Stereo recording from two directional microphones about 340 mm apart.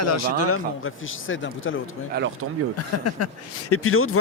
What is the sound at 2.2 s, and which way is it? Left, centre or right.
Speech, right.